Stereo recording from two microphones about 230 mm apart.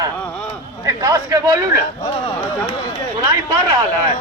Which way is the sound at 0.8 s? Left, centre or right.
Centre.